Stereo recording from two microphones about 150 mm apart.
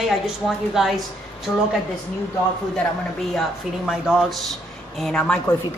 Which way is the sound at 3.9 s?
Centre (ahead or behind).